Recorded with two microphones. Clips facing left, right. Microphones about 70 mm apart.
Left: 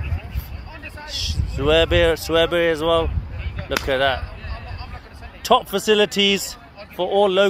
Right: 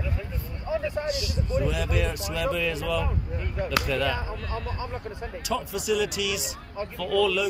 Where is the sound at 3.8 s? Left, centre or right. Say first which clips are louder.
Left 7 dB; left.